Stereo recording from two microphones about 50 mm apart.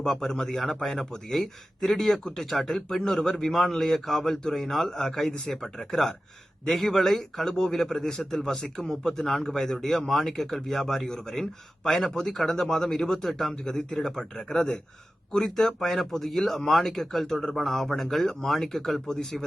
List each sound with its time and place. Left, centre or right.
0.0 s a man's voice: centre